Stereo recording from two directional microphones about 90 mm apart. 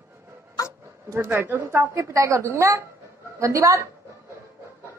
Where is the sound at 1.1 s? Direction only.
25° right (ahead or behind).